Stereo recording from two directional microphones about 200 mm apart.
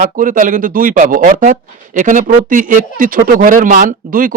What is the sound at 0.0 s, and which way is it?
Speech, 45° right (ahead or behind).